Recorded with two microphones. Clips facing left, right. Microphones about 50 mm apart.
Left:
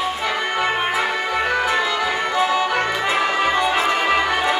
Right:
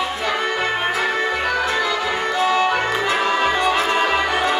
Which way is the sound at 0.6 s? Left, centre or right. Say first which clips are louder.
Even; left.